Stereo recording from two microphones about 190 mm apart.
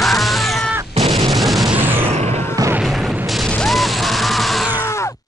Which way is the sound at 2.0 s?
35° right (ahead or behind).